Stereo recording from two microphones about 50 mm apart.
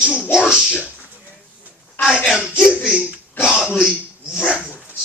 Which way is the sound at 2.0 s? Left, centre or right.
Left.